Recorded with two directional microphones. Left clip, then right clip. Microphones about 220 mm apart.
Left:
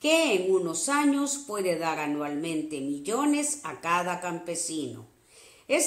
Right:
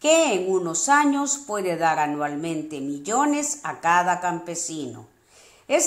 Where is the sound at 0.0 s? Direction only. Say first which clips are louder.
Right 5 dB; 20° right (ahead or behind).